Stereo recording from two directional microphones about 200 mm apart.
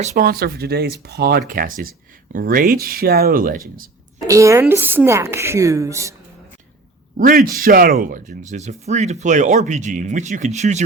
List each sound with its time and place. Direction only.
0.0 s speech: 35° right (ahead or behind)
0.3 s speech: 50° right (ahead or behind)
4.3 s a woman's voice: 15° right (ahead or behind)
7.2 s speech: 45° right (ahead or behind)